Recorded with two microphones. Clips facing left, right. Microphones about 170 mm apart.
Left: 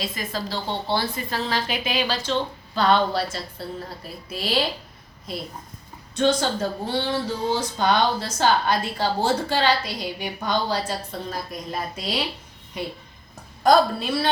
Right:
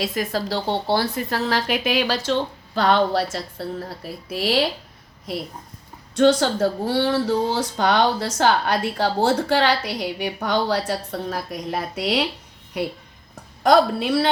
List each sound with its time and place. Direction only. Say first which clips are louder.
0.0 s speech: right 5 dB; 75° right (ahead or behind)
6.1 s speech: right 5 dB; 80° right